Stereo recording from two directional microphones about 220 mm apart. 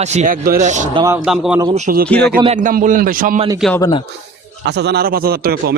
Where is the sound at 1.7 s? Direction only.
40° right (ahead or behind).